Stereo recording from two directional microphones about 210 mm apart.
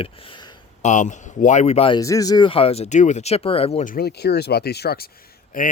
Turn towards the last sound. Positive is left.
turn(degrees=40)  # may be behind; listen again after turning